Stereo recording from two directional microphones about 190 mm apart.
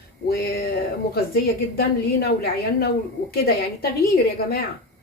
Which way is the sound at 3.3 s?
55° left (ahead or behind).